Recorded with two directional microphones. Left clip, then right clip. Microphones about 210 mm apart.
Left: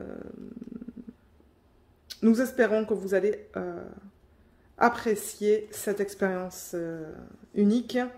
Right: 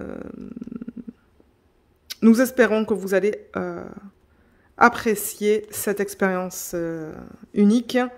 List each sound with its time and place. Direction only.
0.0 s burping: 45° right (ahead or behind)
2.0 s speech: 45° right (ahead or behind)